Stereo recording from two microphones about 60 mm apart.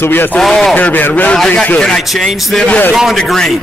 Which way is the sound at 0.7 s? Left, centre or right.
Left.